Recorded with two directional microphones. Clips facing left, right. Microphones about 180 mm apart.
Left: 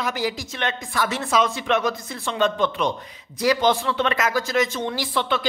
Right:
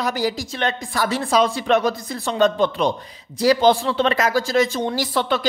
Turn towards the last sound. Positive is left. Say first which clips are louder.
# right 3 dB
turn(degrees=-40)  # may be behind; listen again after turning